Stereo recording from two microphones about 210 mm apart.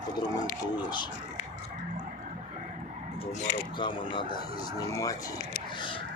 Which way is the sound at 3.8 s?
20° left (ahead or behind).